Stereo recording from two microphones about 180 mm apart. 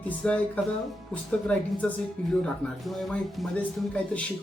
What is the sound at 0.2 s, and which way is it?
Speech, 5° left (ahead or behind).